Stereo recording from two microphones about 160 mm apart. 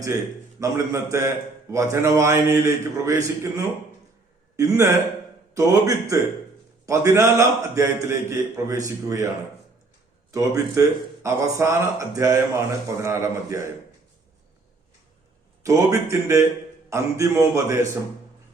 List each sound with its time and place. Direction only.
0.6 s a man's voice: 20° right (ahead or behind)
4.5 s a man's voice: 20° right (ahead or behind)
10.3 s a man's voice: 20° right (ahead or behind)
15.6 s a man's voice: 20° right (ahead or behind)